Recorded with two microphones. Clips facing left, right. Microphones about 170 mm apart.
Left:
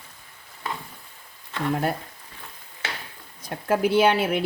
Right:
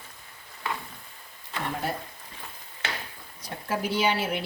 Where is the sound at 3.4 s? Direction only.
55° left (ahead or behind).